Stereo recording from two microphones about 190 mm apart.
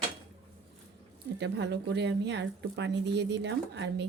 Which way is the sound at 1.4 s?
65° right (ahead or behind).